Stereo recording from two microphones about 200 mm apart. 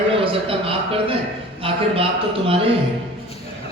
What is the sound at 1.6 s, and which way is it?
Speech, 30° right (ahead or behind).